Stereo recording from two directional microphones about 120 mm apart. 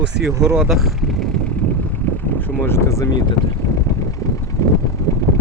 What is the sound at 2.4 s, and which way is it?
Speech, 20° left (ahead or behind).